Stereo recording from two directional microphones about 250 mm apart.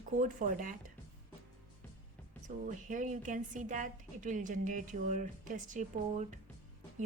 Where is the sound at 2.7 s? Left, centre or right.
Right.